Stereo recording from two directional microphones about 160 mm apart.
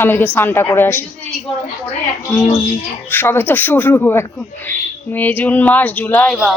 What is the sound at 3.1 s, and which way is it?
Speech, 15° left (ahead or behind).